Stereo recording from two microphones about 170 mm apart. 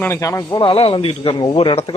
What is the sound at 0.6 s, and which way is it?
Speech, 30° left (ahead or behind).